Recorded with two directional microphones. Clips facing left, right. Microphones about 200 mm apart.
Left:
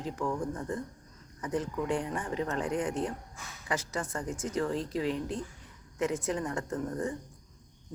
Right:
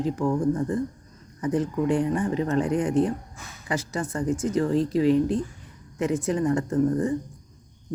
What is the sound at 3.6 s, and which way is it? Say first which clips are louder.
Speech: right 5 dB; 30° right (ahead or behind).